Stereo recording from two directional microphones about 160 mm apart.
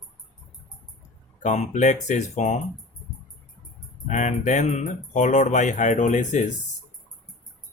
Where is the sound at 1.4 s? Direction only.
50° left (ahead or behind).